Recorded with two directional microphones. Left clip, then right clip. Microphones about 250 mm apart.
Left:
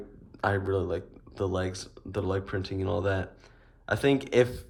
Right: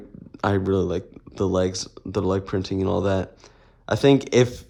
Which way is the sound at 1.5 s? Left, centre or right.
Right.